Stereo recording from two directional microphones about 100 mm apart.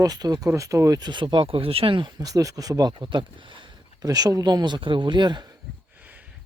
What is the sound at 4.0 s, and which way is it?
Speech, 40° right (ahead or behind).